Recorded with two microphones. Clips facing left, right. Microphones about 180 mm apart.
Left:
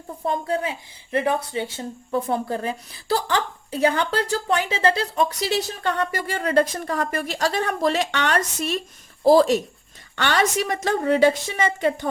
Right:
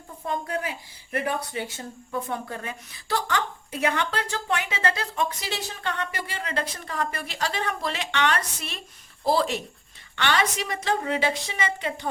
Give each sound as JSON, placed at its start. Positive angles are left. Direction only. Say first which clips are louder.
{"t": 0.3, "sound": "a woman's voice", "louder": "left 5 dB", "side_deg": 30}